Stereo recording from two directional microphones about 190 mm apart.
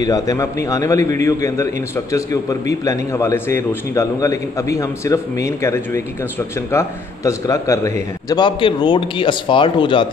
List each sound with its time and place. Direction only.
0.0 s a man's voice: 20° left (ahead or behind)